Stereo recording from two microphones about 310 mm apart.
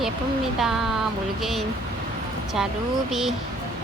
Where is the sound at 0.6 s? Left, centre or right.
Centre.